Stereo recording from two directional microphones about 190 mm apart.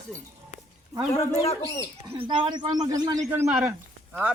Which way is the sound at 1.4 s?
30° left (ahead or behind).